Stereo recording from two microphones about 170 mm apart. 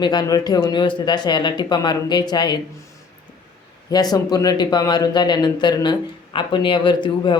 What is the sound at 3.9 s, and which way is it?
Speech, 20° left (ahead or behind).